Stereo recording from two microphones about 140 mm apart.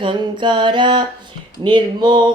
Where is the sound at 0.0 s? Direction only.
35° right (ahead or behind).